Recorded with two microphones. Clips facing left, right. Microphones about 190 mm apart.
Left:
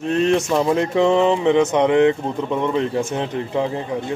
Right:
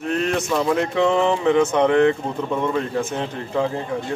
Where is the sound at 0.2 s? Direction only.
25° left (ahead or behind).